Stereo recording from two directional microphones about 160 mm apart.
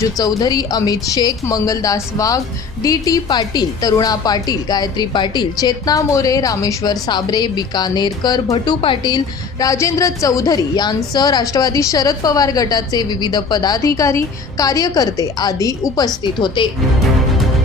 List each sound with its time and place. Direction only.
0.0 s a woman's voice: 25° left (ahead or behind)